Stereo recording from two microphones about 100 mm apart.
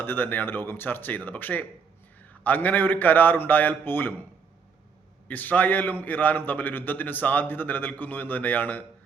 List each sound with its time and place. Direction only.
0.0 s a man's voice: 20° left (ahead or behind)
5.3 s a man's voice: 15° left (ahead or behind)